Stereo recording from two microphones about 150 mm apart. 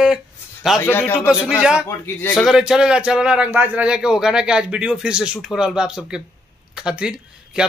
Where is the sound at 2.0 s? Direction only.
15° left (ahead or behind).